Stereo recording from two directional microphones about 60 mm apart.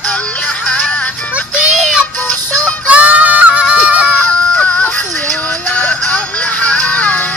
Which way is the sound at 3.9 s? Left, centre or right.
Right.